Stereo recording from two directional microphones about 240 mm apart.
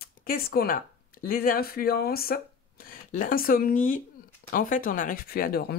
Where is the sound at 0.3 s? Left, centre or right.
Left.